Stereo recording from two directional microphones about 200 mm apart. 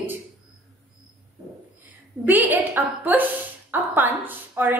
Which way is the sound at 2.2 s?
10° right (ahead or behind).